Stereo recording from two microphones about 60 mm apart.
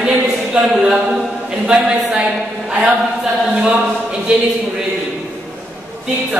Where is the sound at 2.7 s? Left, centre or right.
Centre.